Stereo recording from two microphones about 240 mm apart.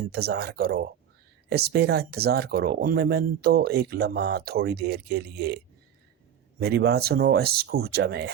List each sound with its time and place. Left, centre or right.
0.1 s speech: right
6.6 s speech: right